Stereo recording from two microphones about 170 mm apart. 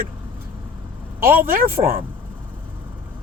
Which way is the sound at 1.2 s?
60° right (ahead or behind).